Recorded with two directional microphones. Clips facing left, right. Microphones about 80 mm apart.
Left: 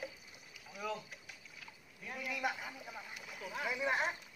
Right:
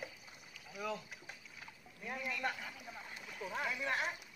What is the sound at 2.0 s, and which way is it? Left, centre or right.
Speech, right.